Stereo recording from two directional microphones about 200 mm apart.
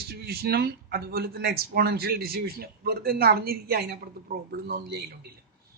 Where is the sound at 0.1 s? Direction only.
50° right (ahead or behind).